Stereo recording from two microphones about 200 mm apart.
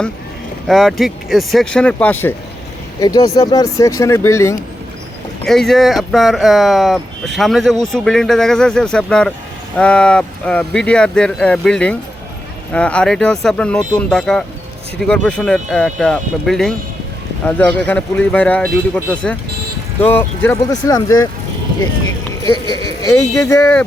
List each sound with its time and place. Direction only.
0.7 s speech: centre (ahead or behind)
5.5 s speech: centre (ahead or behind); by 21.2 s 20° left (ahead or behind)
23.0 s speech: 15° left (ahead or behind)